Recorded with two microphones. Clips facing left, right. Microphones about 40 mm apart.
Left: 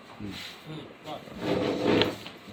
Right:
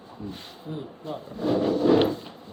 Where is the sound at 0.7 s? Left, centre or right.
Left.